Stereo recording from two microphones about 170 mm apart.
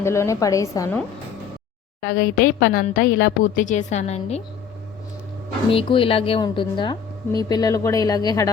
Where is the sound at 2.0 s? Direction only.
65° left (ahead or behind); by 4.4 s 40° left (ahead or behind).